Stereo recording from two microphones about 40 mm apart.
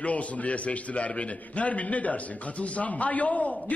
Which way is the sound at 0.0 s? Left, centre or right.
Left.